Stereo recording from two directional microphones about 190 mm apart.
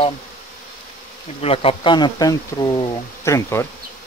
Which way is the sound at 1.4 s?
30° left (ahead or behind).